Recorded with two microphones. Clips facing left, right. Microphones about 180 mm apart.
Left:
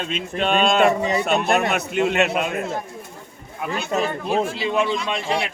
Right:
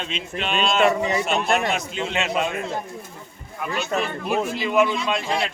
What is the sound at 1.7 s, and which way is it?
Speech, 60° left (ahead or behind).